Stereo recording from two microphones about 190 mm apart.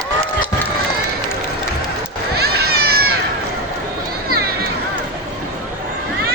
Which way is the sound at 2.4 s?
55° right (ahead or behind).